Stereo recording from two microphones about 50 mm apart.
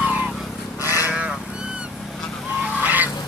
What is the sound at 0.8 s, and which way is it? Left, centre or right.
Sheep, left.